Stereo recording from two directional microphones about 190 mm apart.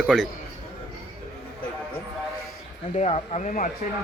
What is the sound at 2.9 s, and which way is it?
Speech, 35° left (ahead or behind).